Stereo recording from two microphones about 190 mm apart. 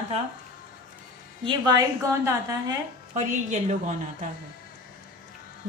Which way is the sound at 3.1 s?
40° right (ahead or behind).